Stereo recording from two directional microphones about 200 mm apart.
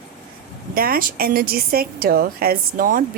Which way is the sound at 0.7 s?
45° right (ahead or behind).